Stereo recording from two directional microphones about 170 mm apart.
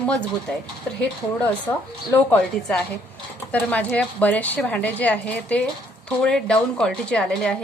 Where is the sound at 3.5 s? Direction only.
10° left (ahead or behind).